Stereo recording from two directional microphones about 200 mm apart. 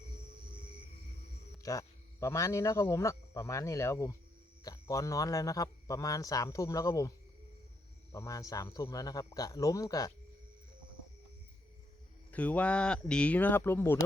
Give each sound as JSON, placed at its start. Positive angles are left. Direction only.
{"t": 1.6, "sound": "a man's voice", "side_deg": 15}
{"t": 8.1, "sound": "a man's voice", "side_deg": 15}
{"t": 12.3, "sound": "a man's voice", "side_deg": 5}